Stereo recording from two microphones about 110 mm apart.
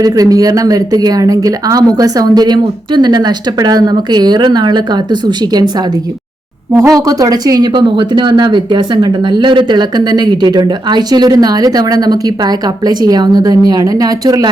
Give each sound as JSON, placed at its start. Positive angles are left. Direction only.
{"t": 0.0, "sound": "speech", "side_deg": -35}